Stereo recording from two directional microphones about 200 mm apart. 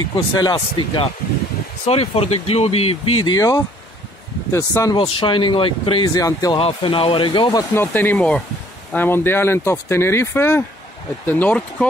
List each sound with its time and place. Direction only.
0.1 s speech: 20° left (ahead or behind)
7.7 s speech: 10° left (ahead or behind)